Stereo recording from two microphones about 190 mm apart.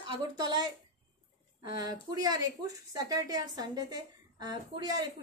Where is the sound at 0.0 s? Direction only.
20° right (ahead or behind).